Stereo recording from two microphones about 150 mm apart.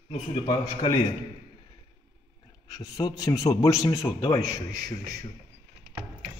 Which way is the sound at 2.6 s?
25° left (ahead or behind).